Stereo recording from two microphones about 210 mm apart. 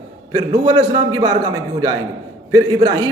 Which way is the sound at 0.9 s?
25° right (ahead or behind).